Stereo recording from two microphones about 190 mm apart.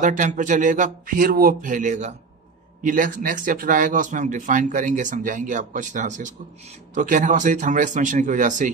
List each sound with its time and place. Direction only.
0.0 s speech: 40° right (ahead or behind)